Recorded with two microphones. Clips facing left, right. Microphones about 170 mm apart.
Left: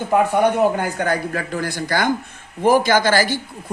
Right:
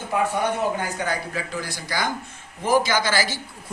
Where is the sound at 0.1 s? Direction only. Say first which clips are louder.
Left 7 dB; 55° left (ahead or behind).